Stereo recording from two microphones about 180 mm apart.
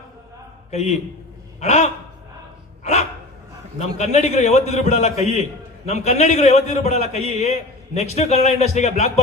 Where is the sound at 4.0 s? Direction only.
35° left (ahead or behind).